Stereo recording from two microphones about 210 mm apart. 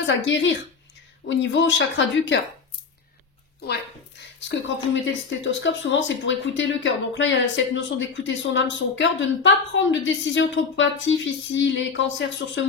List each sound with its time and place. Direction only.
0.0 s speech: 60° left (ahead or behind)
4.4 s a woman's voice: 60° left (ahead or behind)